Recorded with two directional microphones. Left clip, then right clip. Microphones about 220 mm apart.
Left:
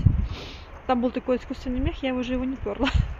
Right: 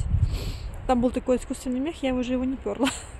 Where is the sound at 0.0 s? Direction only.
15° right (ahead or behind).